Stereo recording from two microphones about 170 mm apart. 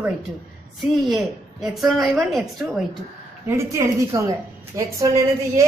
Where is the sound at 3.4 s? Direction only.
15° right (ahead or behind).